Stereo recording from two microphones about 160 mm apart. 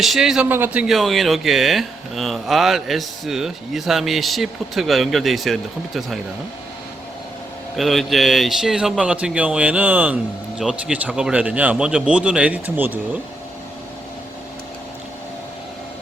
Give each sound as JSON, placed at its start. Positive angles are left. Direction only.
{"t": 0.0, "sound": "speech", "side_deg": 0}
{"t": 7.8, "sound": "speech", "side_deg": 0}